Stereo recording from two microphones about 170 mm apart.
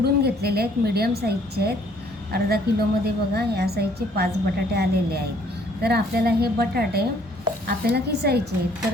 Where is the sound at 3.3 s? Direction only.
70° right (ahead or behind).